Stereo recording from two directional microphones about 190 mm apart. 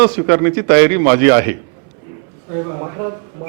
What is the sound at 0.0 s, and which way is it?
Speech, 15° right (ahead or behind).